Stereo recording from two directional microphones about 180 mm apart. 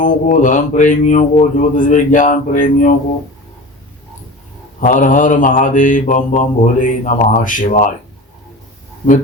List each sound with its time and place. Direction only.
0.0 s mantra: 45° left (ahead or behind)
4.8 s mantra: 45° left (ahead or behind)